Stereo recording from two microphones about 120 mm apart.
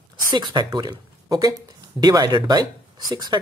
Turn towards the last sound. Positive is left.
turn(degrees=-35)  # may be behind; listen again after turning